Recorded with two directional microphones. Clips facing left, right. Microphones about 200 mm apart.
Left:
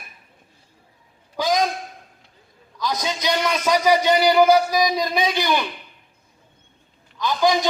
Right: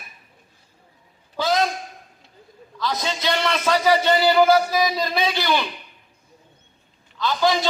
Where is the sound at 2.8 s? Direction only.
15° left (ahead or behind).